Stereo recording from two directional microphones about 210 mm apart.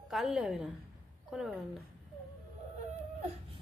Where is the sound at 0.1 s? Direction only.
Centre (ahead or behind).